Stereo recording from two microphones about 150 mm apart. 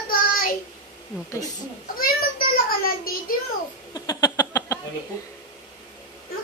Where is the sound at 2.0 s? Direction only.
80° left.